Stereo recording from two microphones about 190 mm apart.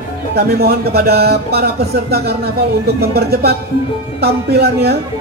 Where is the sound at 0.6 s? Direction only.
55° right (ahead or behind).